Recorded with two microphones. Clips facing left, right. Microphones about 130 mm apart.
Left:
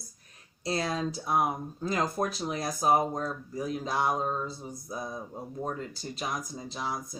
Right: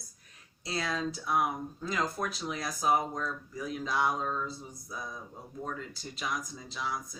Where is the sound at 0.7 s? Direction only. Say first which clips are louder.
Left 3 dB; 35° left (ahead or behind).